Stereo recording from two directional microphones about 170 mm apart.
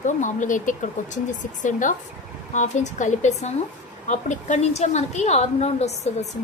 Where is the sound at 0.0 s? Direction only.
45° left (ahead or behind).